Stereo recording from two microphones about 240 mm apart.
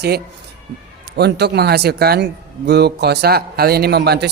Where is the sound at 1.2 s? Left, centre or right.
Right.